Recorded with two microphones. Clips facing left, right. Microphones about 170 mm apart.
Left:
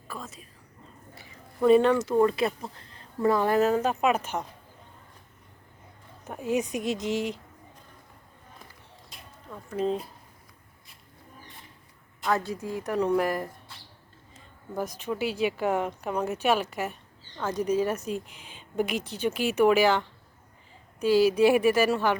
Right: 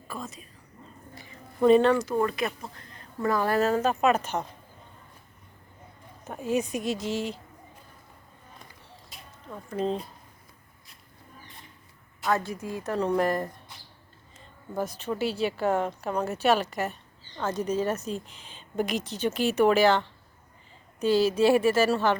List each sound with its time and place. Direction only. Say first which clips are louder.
0.1 s speech: right 2 dB; centre (ahead or behind)
1.6 s a woman's voice: even; 10° left (ahead or behind)
2.2 s speech: left 4 dB; 30° left (ahead or behind)
2.7 s a sound: right 2 dB; 30° left (ahead or behind)
3.2 s a woman's voice: left 2 dB; 20° left (ahead or behind)
6.2 s speech: even; 15° left (ahead or behind)
9.0 s a sound: right 1 dB; centre (ahead or behind)
9.7 s speech: left 1 dB; 5° left (ahead or behind)
12.7 s a woman's voice: left 1 dB; 15° left (ahead or behind)
14.8 s a woman's voice: right 1 dB; 10° left (ahead or behind)